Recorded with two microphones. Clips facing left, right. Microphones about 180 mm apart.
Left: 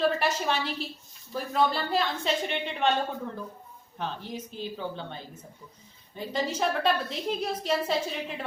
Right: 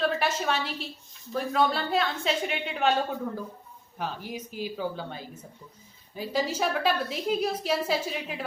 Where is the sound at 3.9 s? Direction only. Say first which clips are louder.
Right 1 dB; 10° right (ahead or behind).